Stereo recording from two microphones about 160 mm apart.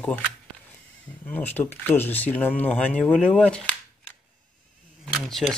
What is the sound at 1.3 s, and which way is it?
Speech, 10° left (ahead or behind).